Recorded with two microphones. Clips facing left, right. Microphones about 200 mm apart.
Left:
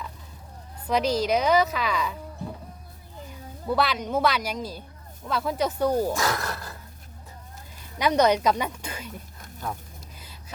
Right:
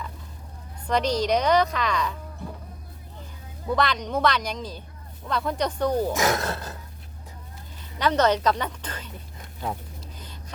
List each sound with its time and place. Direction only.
0.9 s a woman's voice: 5° left (ahead or behind)
3.7 s speech: 5° left (ahead or behind)
6.1 s speech: 20° right (ahead or behind)
7.9 s speech: 10° left (ahead or behind)